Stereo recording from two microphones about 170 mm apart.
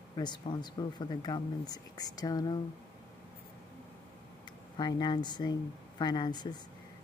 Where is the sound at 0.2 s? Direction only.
25° left (ahead or behind).